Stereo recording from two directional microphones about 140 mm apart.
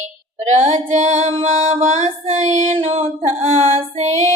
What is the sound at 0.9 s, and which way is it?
Music, 55° right (ahead or behind).